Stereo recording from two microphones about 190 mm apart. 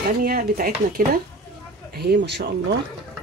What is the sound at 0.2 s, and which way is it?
Speech, 50° right (ahead or behind).